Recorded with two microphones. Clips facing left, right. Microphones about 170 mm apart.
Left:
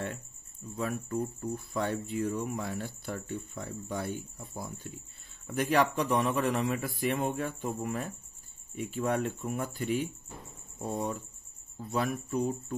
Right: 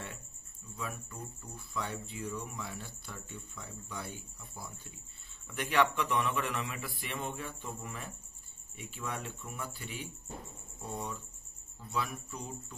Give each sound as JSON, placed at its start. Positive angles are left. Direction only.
{"t": 0.7, "sound": "speech", "side_deg": 55}
{"t": 5.5, "sound": "speech", "side_deg": 40}